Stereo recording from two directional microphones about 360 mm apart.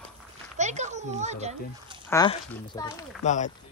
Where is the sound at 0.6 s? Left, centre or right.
Centre.